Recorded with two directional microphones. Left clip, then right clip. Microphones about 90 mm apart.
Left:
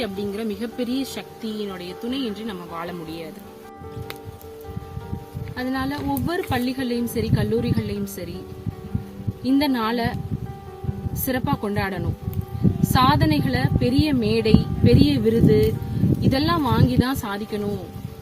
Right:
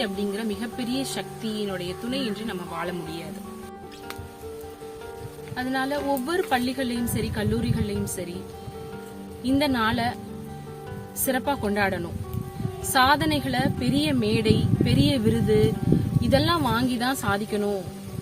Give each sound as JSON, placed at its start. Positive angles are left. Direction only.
{"t": 0.0, "sound": "speech", "side_deg": -35}
{"t": 5.5, "sound": "speech", "side_deg": -35}
{"t": 9.4, "sound": "speech", "side_deg": -35}
{"t": 11.3, "sound": "a woman's voice", "side_deg": -30}